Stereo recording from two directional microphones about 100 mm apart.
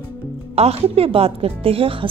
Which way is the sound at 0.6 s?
85° right.